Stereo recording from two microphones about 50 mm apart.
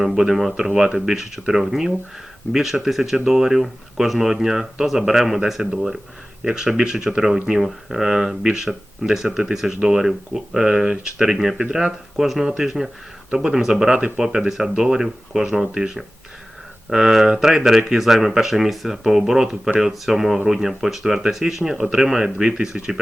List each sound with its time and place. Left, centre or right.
0.0 s speech: centre
16.9 s speech: centre